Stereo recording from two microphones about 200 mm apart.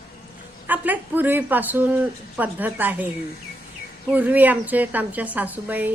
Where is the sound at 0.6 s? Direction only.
10° right (ahead or behind).